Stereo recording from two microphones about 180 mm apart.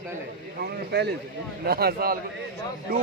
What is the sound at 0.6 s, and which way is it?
A man's voice, 65° right (ahead or behind).